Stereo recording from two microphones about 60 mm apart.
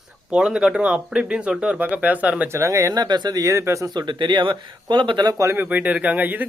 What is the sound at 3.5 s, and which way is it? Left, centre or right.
Speech, right.